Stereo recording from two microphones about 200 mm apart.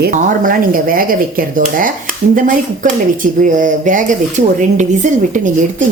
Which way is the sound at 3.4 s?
40° right (ahead or behind).